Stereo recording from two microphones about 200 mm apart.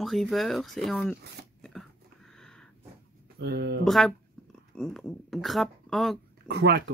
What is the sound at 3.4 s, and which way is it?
Speech, 55° right (ahead or behind).